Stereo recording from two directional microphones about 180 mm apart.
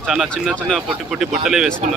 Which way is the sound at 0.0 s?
Centre (ahead or behind).